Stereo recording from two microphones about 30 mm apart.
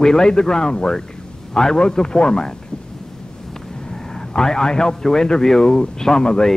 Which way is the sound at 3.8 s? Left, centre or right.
Left.